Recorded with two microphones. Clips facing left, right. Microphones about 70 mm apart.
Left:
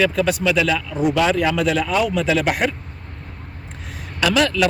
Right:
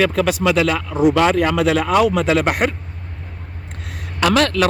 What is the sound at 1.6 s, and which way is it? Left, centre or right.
Speech, right.